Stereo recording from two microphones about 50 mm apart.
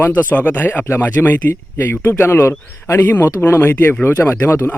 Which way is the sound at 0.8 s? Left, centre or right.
Left.